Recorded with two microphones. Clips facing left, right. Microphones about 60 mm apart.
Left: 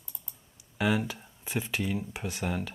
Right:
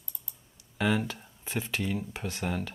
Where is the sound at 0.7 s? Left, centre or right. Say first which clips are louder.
Even; centre.